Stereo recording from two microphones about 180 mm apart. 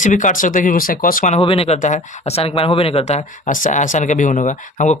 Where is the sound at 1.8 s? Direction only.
45° left (ahead or behind).